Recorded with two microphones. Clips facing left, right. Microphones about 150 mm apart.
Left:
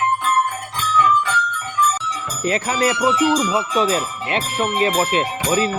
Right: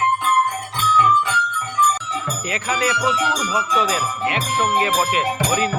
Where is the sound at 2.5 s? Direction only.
35° left (ahead or behind).